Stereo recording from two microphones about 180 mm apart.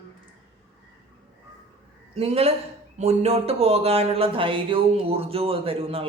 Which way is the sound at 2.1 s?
35° right (ahead or behind).